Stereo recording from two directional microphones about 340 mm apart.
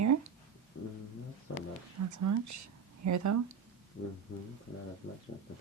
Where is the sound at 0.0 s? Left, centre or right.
Right.